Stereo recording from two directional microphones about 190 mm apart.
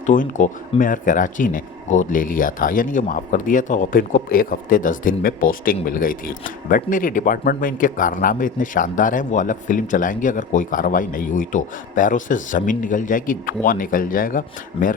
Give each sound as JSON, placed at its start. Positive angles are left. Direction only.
{"t": 0.0, "sound": "speech", "side_deg": 40}